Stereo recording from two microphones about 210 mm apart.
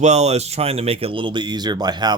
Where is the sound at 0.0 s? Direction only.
30° right (ahead or behind).